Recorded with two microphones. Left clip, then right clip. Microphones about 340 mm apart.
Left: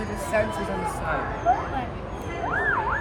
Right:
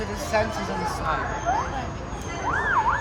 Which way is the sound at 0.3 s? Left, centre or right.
Centre.